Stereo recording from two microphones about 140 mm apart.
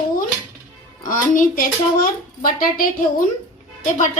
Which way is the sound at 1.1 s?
75° left (ahead or behind).